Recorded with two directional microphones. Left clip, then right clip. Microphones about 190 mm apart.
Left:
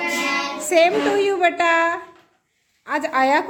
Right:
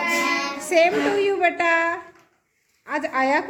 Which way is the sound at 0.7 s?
5° left (ahead or behind).